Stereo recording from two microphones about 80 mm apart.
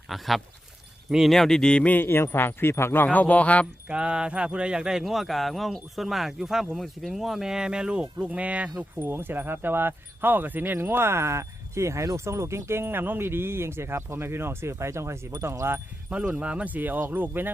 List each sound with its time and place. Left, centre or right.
0.1 s speech: centre
3.8 s speech: centre; by 15.8 s right
16.0 s speech: centre